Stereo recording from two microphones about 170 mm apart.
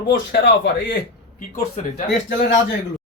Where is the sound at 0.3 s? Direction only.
70° left (ahead or behind).